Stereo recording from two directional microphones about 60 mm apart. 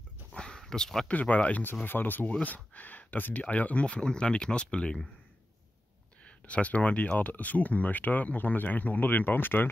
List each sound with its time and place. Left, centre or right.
0.3 s a sound: centre
1.0 s speech: left
6.2 s speech: left